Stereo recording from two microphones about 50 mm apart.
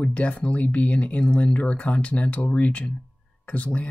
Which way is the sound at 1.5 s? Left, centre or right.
Left.